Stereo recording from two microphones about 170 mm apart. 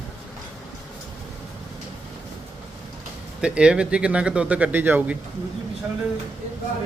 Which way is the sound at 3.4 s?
5° right (ahead or behind).